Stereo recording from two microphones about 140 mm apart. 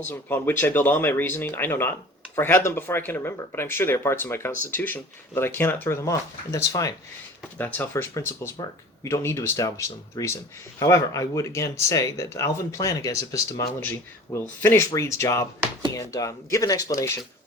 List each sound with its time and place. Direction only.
0.1 s speech: 15° left (ahead or behind)